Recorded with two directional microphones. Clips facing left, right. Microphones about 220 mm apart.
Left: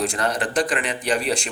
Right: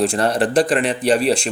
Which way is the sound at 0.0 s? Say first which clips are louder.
Right 6 dB; 30° right (ahead or behind).